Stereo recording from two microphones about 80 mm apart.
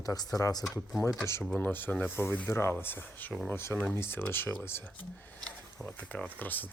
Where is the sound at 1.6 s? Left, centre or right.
Left.